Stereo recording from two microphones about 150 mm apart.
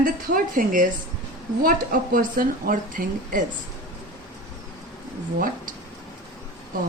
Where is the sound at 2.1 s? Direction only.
65° right (ahead or behind).